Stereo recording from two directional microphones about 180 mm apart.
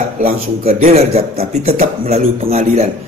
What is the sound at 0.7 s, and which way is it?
A man's voice, 35° right (ahead or behind).